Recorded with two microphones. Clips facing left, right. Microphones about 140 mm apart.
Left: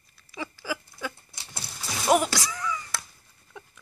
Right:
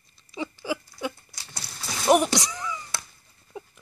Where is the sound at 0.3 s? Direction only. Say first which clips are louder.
Right 3 dB; 20° right (ahead or behind).